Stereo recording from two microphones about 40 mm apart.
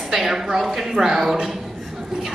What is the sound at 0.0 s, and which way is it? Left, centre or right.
A woman's voice, centre.